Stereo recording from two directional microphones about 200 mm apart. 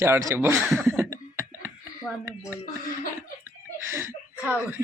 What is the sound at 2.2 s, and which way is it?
Speech, 5° right (ahead or behind).